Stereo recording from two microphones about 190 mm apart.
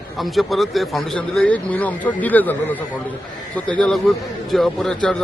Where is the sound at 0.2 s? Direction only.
Centre (ahead or behind).